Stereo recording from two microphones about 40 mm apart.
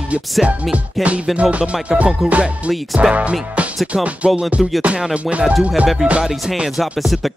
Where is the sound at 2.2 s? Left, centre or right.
Right.